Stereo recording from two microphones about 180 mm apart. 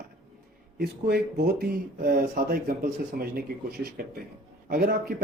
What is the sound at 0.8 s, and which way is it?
Speech, 60° right (ahead or behind).